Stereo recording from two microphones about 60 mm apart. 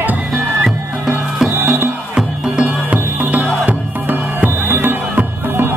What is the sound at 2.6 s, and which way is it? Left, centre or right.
Music, right.